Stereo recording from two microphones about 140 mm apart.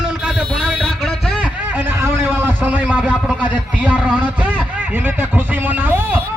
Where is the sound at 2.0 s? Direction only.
15° right (ahead or behind).